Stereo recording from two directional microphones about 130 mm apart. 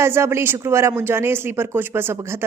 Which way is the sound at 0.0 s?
20° right (ahead or behind).